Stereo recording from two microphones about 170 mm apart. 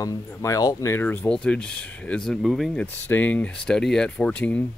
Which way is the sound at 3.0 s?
10° left (ahead or behind).